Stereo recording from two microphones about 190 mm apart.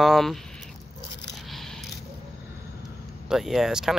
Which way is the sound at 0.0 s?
Centre (ahead or behind).